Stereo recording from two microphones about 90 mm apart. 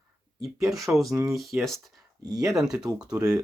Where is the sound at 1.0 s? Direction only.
40° right (ahead or behind).